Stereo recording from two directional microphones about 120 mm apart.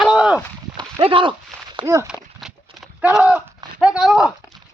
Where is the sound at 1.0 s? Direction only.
45° right (ahead or behind).